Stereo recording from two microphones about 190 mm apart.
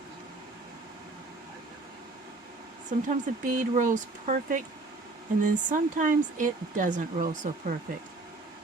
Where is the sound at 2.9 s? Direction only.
40° right (ahead or behind).